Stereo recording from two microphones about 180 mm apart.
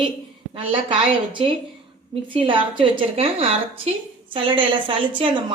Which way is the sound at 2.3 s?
30° right (ahead or behind).